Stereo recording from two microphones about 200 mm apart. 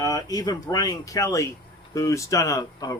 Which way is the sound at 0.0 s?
20° left (ahead or behind).